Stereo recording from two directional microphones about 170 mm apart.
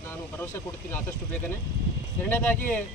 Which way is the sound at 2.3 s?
10° left (ahead or behind).